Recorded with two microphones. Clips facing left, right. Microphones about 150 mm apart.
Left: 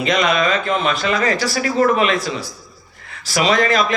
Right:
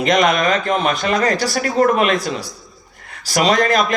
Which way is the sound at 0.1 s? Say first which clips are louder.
Right 2 dB; 50° right (ahead or behind).